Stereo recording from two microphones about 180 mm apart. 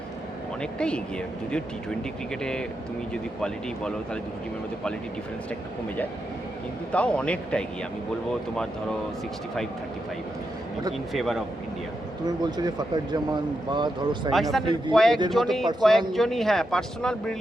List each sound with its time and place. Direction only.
0.6 s speech: 5° left (ahead or behind)
6.9 s speech: 5° left (ahead or behind)
11.1 s speech: centre (ahead or behind)
12.2 s speech: 20° right (ahead or behind)
14.3 s speech: centre (ahead or behind)